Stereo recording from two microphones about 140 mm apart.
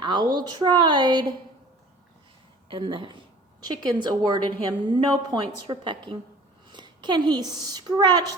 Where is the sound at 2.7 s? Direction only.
35° right (ahead or behind).